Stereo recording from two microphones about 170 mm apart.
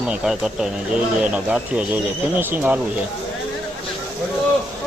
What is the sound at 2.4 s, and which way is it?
Speech, 10° right (ahead or behind).